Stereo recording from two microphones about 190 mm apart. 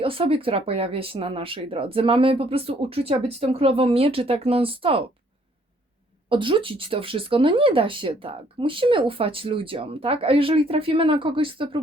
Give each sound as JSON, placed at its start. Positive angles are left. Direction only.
{"t": 0.0, "sound": "speech", "side_deg": -30}
{"t": 6.2, "sound": "speech", "side_deg": -25}